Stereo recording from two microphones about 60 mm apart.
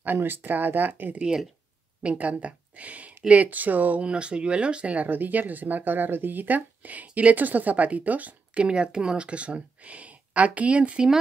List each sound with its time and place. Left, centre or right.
0.0 s speech: right
1.2 s speech: centre; by 8.6 s right
8.6 s speech: centre